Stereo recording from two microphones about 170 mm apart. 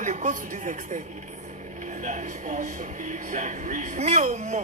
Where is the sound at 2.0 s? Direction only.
45° right (ahead or behind).